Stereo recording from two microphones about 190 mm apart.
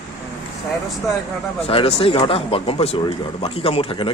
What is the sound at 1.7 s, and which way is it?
A man's voice, 30° left (ahead or behind).